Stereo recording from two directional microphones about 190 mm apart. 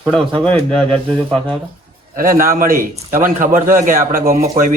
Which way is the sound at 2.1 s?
50° right (ahead or behind).